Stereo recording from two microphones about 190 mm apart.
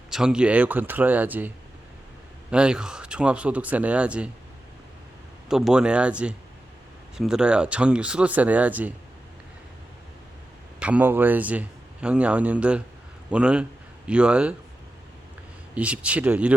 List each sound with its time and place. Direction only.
0.1 s speech: 5° right (ahead or behind)
5.5 s speech: 5° right (ahead or behind)
10.8 s speech: 5° right (ahead or behind)
15.7 s speech: 5° right (ahead or behind)